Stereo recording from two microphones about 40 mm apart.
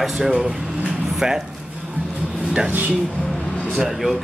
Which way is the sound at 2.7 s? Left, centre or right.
Right.